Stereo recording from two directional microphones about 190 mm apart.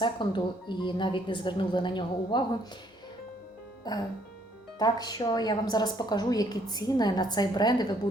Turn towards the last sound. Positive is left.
turn(degrees=20)  # may be behind; listen again after turning